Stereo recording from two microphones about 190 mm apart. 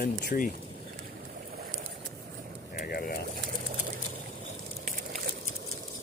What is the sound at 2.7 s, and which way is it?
Speech, 50° left (ahead or behind).